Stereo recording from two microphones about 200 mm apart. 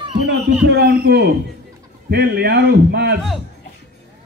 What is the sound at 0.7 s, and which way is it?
A man's voice, 55° right (ahead or behind).